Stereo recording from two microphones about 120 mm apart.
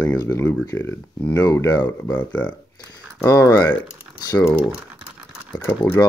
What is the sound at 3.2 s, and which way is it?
Speech, 20° left (ahead or behind).